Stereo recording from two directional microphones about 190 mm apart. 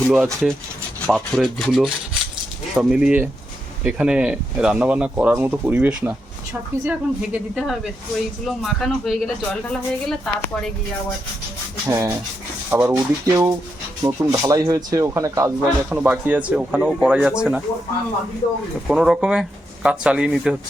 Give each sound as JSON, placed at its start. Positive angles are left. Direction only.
{"t": 0.1, "sound": "speech", "side_deg": -5}
{"t": 11.9, "sound": "speech", "side_deg": -15}
{"t": 18.9, "sound": "speech", "side_deg": 0}